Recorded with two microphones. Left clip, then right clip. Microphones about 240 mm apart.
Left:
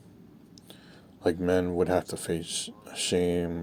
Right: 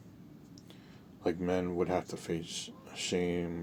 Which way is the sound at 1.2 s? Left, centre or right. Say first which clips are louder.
Left 7 dB; left.